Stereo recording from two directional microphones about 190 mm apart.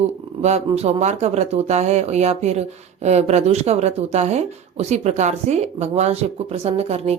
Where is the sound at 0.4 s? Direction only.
35° right (ahead or behind).